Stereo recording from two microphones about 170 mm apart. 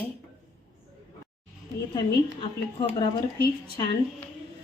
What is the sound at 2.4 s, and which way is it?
Speech, 30° left (ahead or behind).